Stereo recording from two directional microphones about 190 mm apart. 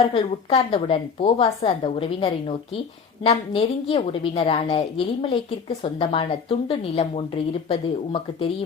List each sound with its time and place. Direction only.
0.0 s a woman's voice: 30° left (ahead or behind)